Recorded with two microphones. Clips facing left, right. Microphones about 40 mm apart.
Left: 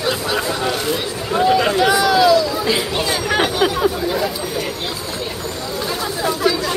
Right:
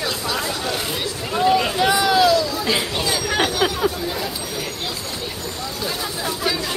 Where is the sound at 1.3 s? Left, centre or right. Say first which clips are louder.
Left 3 dB; centre.